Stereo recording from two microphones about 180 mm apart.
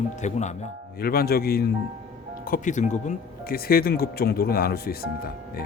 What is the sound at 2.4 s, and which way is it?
Speech, 45° left (ahead or behind).